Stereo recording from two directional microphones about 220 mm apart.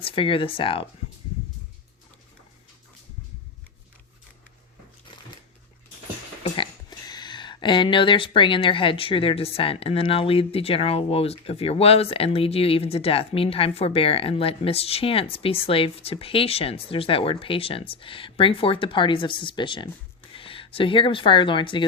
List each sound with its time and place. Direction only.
0.0 s speech: 25° left (ahead or behind)
6.4 s speech: 20° left (ahead or behind)